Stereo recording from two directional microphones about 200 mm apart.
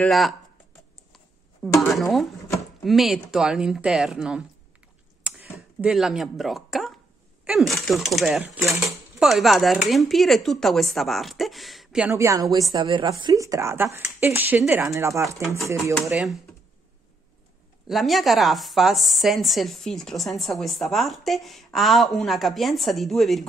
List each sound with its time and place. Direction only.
0.0 s speech: centre (ahead or behind)
1.8 s speech: centre (ahead or behind)
5.2 s a sound: 5° right (ahead or behind)
7.4 s speech: centre (ahead or behind)
12.1 s speech: 15° right (ahead or behind)
16.0 s speech: centre (ahead or behind)
17.8 s speech: centre (ahead or behind)